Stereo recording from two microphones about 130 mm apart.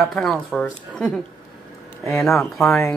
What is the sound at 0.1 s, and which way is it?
Speech, centre (ahead or behind).